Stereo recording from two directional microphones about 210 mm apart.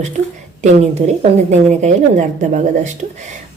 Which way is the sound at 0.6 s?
35° right (ahead or behind).